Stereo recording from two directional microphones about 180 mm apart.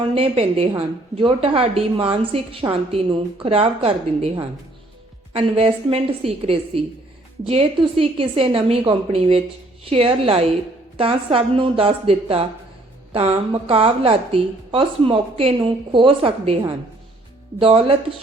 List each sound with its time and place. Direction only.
0.0 s a woman's voice: 35° right (ahead or behind)
17.6 s a woman's voice: 30° right (ahead or behind)